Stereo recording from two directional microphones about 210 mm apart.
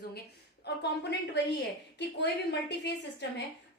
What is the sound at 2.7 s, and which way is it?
Speech, 55° left (ahead or behind).